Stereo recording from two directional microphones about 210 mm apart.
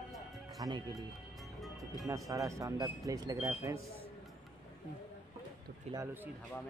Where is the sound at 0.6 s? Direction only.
20° right (ahead or behind).